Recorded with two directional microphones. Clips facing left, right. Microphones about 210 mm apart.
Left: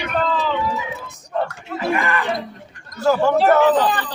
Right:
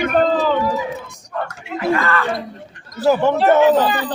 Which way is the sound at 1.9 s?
15° left (ahead or behind).